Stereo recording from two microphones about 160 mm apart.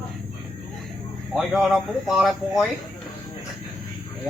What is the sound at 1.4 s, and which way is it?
Speech, centre (ahead or behind).